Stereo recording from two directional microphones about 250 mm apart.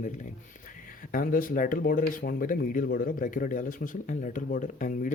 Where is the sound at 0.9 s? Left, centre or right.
Left.